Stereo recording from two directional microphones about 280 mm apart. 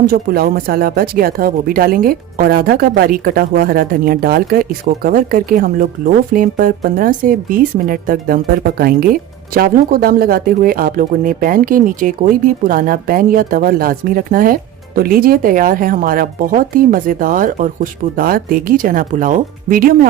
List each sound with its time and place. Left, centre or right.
0.0 s a woman's voice: right